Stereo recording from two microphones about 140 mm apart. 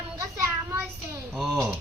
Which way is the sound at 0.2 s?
20° right (ahead or behind).